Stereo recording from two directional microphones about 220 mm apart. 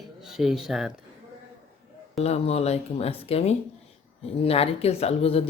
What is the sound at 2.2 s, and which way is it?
Speech, 30° left (ahead or behind).